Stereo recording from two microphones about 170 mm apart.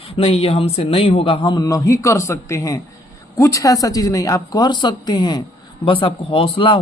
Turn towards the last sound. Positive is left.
turn(degrees=30)  # may be behind; listen again after turning